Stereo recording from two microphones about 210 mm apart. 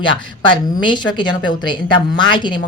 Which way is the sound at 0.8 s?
20° left (ahead or behind).